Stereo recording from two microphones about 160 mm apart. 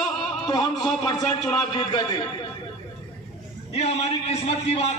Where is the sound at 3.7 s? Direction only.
40° left (ahead or behind).